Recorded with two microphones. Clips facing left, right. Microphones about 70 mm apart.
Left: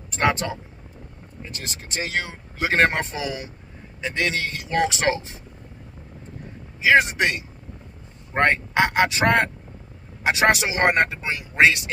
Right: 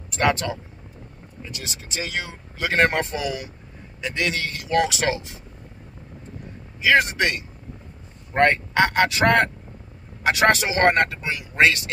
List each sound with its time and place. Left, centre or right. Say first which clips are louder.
0.2 s speech: right 1 dB; left
1.5 s speech: left 1 dB; left
2.6 s speech: even; left
6.8 s speech: left 1 dB; centre